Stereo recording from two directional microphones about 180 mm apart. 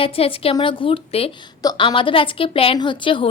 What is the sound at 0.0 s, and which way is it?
A woman's voice, 30° left (ahead or behind).